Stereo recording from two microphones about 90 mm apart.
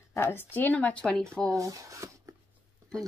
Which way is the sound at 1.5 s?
40° right (ahead or behind).